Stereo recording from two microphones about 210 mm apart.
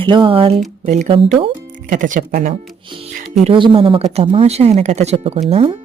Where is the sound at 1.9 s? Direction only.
40° right (ahead or behind).